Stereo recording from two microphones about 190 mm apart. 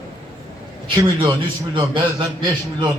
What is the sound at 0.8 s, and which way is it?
A man's voice, 25° right (ahead or behind).